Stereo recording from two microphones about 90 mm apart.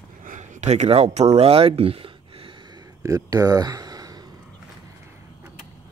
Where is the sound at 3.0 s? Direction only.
40° right (ahead or behind).